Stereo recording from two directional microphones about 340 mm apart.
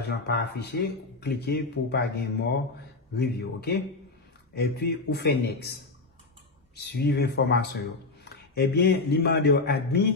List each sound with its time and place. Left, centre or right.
0.0 s speech: left